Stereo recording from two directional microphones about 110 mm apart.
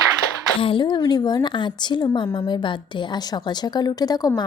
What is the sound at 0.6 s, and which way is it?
A woman's voice, 50° left (ahead or behind).